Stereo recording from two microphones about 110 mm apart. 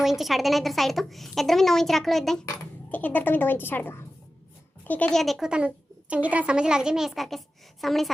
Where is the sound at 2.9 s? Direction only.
15° left (ahead or behind).